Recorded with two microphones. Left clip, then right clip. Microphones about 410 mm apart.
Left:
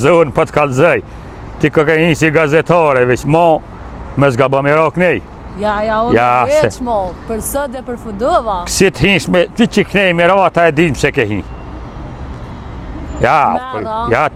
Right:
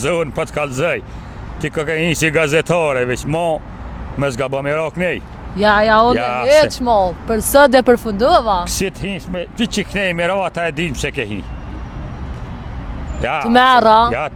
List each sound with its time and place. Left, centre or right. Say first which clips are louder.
0.0 s speech: left 9 dB; left
5.5 s speech: right 3 dB; right
6.1 s speech: left 7 dB; left
6.7 s speech: right 2 dB; right
7.5 s speech: right 13 dB; right
8.2 s speech: left 4 dB; right
8.6 s speech: left 10 dB; left
9.6 s speech: left 7 dB; left
13.2 s speech: left 1 dB; left